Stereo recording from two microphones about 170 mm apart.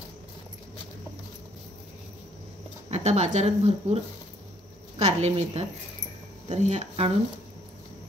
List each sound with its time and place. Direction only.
2.9 s speech: 40° right (ahead or behind)